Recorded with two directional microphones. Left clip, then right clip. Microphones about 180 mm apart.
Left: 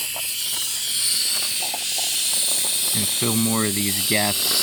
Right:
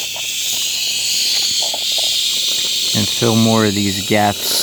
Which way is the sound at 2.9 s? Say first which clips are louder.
Right 8 dB; 15° right (ahead or behind).